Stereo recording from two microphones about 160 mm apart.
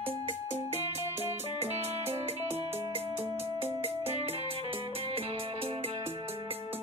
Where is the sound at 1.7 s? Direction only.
40° right (ahead or behind).